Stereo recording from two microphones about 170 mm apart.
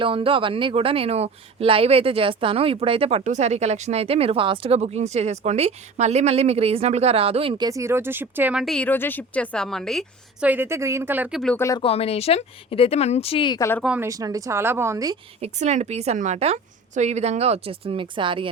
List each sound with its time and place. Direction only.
0.0 s speech: 30° right (ahead or behind)
7.7 s speech: 15° right (ahead or behind)
8.6 s a woman's voice: 5° left (ahead or behind)
10.4 s speech: 10° right (ahead or behind)
11.5 s speech: 15° left (ahead or behind)
11.8 s speech: 35° left (ahead or behind)
13.8 s speech: 10° right (ahead or behind)
14.1 s a woman's voice: 20° right (ahead or behind)
15.4 s speech: 40° right (ahead or behind)